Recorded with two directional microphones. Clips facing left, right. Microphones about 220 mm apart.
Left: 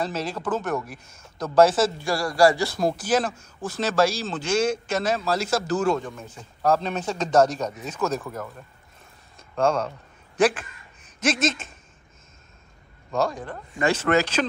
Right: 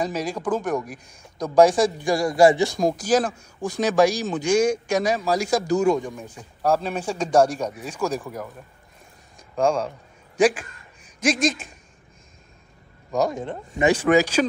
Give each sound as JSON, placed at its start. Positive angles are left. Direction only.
{"t": 0.0, "sound": "a man's voice", "side_deg": -15}
{"t": 9.4, "sound": "a sound", "side_deg": -10}
{"t": 10.3, "sound": "a man's voice", "side_deg": -10}
{"t": 13.1, "sound": "a man's voice", "side_deg": -20}